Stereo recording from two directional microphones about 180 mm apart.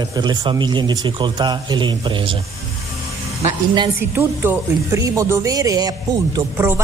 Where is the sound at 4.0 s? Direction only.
15° right (ahead or behind).